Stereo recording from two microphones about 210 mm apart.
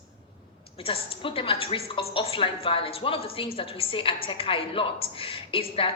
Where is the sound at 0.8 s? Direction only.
25° left (ahead or behind).